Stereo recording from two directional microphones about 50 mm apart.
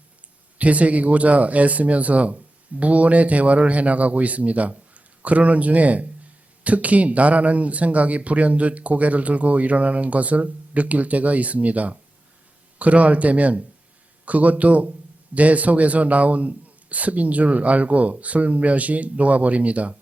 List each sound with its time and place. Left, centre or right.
0.6 s speech: right